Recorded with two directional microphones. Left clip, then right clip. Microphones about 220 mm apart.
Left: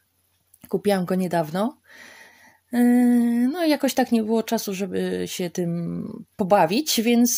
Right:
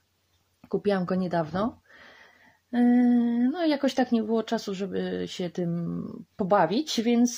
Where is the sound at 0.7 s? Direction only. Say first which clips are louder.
Left 4 dB; 35° left (ahead or behind).